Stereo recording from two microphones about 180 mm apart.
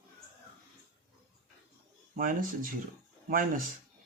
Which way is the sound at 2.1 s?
50° right (ahead or behind).